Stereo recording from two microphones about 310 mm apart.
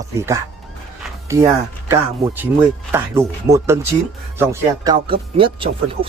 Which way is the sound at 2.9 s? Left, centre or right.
Centre.